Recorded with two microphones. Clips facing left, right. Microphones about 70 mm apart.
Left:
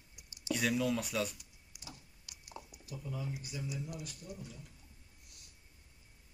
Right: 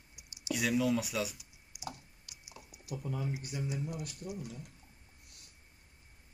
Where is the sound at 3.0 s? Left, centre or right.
Right.